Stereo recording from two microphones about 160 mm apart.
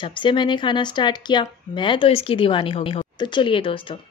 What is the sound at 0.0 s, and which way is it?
Speech, 30° left (ahead or behind).